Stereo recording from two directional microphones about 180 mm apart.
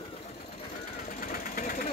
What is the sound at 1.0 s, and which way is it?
Vehicle, 50° left (ahead or behind).